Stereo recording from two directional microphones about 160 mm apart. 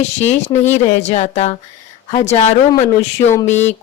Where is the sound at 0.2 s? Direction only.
45° left (ahead or behind).